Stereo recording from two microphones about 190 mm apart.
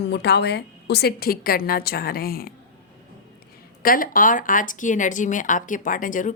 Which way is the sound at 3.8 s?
50° left (ahead or behind).